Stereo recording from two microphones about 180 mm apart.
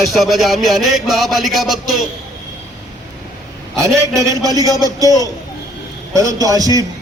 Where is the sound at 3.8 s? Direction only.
15° right (ahead or behind).